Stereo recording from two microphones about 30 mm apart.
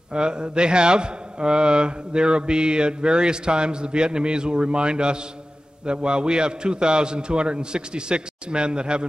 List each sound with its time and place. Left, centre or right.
0.1 s a man's voice: right